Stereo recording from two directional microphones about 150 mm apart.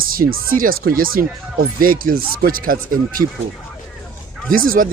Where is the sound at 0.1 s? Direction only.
75° right (ahead or behind).